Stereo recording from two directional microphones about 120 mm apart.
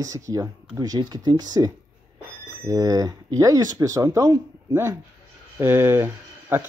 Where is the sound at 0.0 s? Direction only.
30° right (ahead or behind).